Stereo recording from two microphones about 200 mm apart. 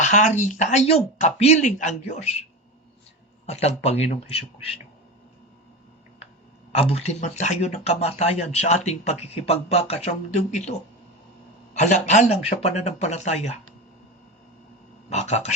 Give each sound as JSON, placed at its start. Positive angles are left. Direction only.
{"t": 0.0, "sound": "speech", "side_deg": 40}
{"t": 6.7, "sound": "speech", "side_deg": 30}
{"t": 15.1, "sound": "speech", "side_deg": 35}